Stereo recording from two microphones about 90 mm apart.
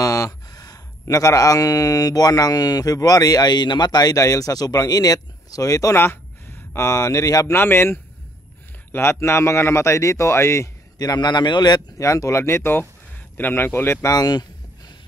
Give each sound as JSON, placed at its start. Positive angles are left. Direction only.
{"t": 0.0, "sound": "speech", "side_deg": 40}
{"t": 5.9, "sound": "speech", "side_deg": 25}
{"t": 7.5, "sound": "a man's voice", "side_deg": 25}
{"t": 11.0, "sound": "a man's voice", "side_deg": 50}
{"t": 12.0, "sound": "a man's voice", "side_deg": 35}
{"t": 14.1, "sound": "a man's voice", "side_deg": 45}